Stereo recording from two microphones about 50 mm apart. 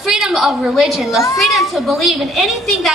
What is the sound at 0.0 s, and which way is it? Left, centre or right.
A woman's voice, centre.